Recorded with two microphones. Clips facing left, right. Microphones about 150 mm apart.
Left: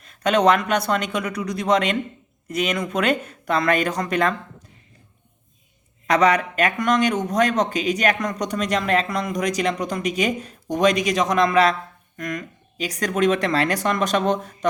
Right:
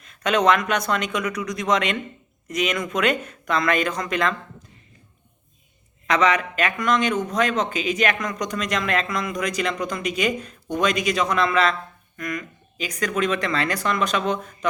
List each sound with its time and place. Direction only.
0.0 s speech: 35° left (ahead or behind)
6.1 s speech: 40° left (ahead or behind)